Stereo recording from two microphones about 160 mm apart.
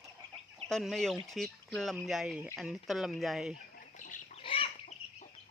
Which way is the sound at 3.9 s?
55° left (ahead or behind).